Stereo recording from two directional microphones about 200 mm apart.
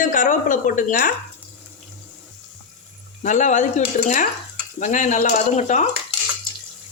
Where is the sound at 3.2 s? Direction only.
40° left (ahead or behind).